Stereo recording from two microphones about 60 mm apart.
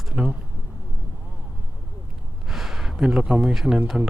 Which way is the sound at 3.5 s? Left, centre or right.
Centre.